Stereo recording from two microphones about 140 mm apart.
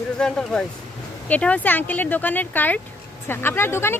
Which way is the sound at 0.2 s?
5° left (ahead or behind).